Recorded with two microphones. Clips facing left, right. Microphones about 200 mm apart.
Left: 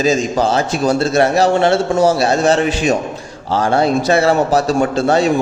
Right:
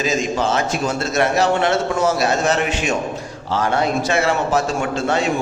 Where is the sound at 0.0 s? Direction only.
35° left (ahead or behind).